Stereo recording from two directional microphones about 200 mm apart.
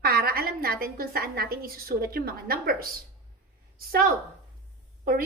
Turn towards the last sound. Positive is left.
turn(degrees=-50)  # may be behind; listen again after turning